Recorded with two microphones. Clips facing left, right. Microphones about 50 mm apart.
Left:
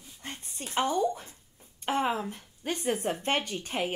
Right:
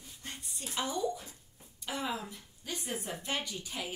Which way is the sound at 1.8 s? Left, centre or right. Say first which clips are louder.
Left 8 dB; left.